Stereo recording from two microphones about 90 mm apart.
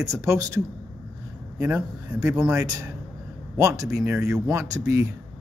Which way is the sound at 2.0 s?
40° right (ahead or behind).